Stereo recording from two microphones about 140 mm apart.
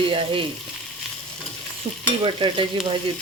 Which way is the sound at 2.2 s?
35° right (ahead or behind).